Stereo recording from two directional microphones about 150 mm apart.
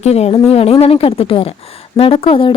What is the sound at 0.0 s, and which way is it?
A woman's voice, 45° left (ahead or behind).